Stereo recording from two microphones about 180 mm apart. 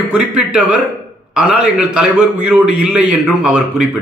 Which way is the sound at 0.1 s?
5° right (ahead or behind).